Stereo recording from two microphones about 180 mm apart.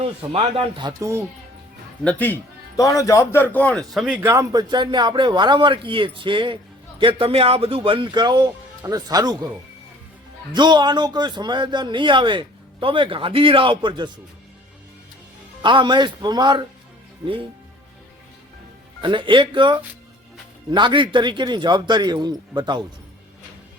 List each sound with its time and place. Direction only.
0.0 s a man's voice: 30° right (ahead or behind)
2.0 s a man's voice: 10° left (ahead or behind); by 9.5 s 20° right (ahead or behind)
10.5 s a man's voice: 25° right (ahead or behind)
15.6 s a man's voice: 25° right (ahead or behind)
19.0 s a man's voice: 25° right (ahead or behind)